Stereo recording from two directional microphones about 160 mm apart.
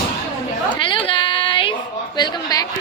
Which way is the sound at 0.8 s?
35° left (ahead or behind).